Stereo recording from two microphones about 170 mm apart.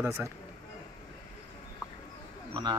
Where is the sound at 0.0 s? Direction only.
15° right (ahead or behind).